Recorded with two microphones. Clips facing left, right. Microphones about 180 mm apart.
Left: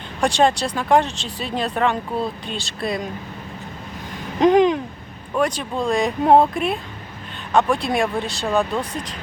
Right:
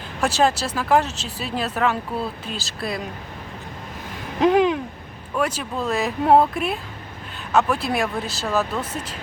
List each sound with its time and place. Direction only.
0.2 s speech: 5° right (ahead or behind)
4.4 s speech: 5° right (ahead or behind)